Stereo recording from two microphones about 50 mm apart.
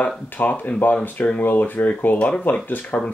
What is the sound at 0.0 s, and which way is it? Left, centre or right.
Speech, left.